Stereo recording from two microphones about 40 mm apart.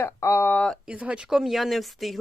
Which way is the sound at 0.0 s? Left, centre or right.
Left.